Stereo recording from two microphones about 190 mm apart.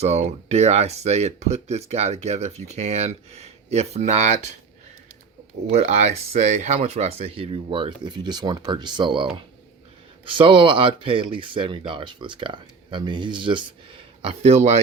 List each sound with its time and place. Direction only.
0.0 s speech: 35° right (ahead or behind)
5.6 s speech: 35° right (ahead or behind)
10.2 s speech: 25° right (ahead or behind)